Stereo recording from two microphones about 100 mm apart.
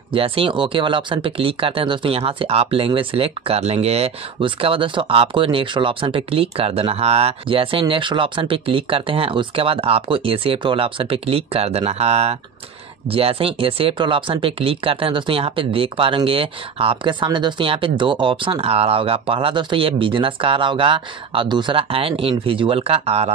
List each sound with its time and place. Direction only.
0.1 s speech: 65° right (ahead or behind); by 12.4 s 90° right
13.1 s speech: 70° right (ahead or behind); by 21.7 s 50° right (ahead or behind)
21.7 s speech: 70° right (ahead or behind); by 23.3 s 85° right